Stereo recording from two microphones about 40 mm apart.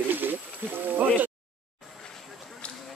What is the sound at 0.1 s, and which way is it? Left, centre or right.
Wild animals, right.